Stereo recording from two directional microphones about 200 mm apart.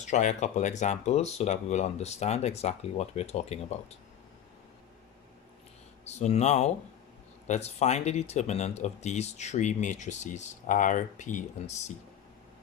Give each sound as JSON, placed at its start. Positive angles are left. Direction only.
{"t": 0.0, "sound": "speech", "side_deg": 35}
{"t": 6.1, "sound": "speech", "side_deg": 35}